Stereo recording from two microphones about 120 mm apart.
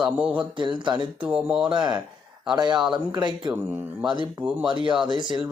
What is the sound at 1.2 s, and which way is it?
Speech, 10° right (ahead or behind).